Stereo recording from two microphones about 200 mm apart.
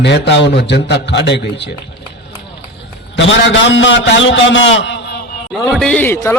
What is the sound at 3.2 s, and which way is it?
A man's voice, 65° left (ahead or behind).